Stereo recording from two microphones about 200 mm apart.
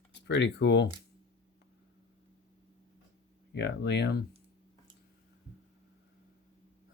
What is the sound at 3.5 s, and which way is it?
Speech, 60° left (ahead or behind).